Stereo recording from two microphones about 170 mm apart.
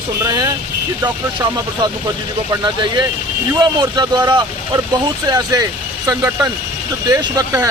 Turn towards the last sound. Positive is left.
turn(degrees=-20)  # may be behind; listen again after turning